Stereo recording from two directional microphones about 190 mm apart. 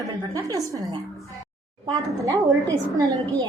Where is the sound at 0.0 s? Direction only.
20° right (ahead or behind).